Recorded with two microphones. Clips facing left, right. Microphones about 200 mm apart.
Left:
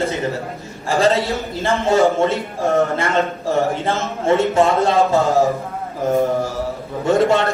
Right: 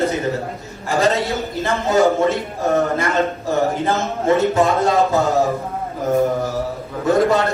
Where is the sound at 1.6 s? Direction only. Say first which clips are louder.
Left 1 dB; 25° left (ahead or behind).